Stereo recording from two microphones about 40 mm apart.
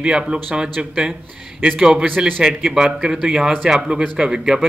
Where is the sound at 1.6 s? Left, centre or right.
Right.